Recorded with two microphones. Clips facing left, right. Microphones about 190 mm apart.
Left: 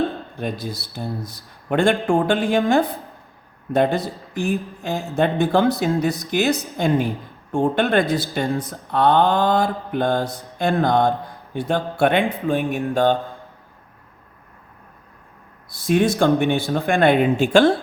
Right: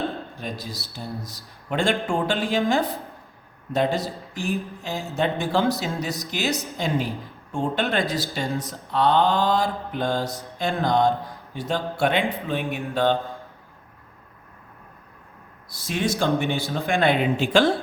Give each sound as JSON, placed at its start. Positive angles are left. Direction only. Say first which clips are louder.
{"t": 0.3, "sound": "speech", "louder": "left 6 dB", "side_deg": 55}
{"t": 15.7, "sound": "speech", "louder": "left 8 dB", "side_deg": 55}